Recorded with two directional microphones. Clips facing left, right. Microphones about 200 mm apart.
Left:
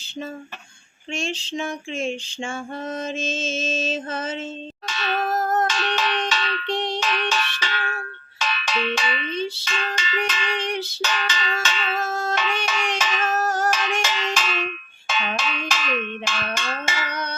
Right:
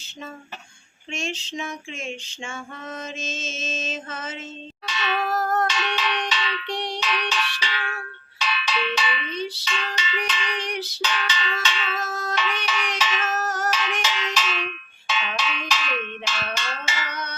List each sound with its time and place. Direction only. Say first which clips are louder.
1.1 s music: left 3 dB; 30° left (ahead or behind)
5.4 s music: left 2 dB; 20° left (ahead or behind)
5.6 s a sound: left 2 dB; 45° left (ahead or behind)
7.0 s music: left 2 dB; 50° left (ahead or behind)
9.3 s music: left 3 dB; 30° left (ahead or behind)
9.6 s fire alarm: left 2 dB; 50° left (ahead or behind)
10.7 s music: left 3 dB; 25° left (ahead or behind)
11.0 s cowbell: left 1 dB; 45° left (ahead or behind)
12.0 s a sound: left 4 dB; 30° left (ahead or behind)
12.3 s a sound: left 2 dB; 50° left (ahead or behind)
13.4 s music: left 4 dB; 30° left (ahead or behind)
13.7 s music: left 3 dB; 50° left (ahead or behind)
14.0 s cowbell: left 2 dB; 50° left (ahead or behind)